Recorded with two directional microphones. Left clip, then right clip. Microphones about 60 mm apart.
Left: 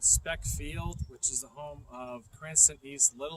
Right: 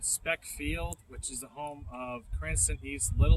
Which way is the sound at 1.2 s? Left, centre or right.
Right.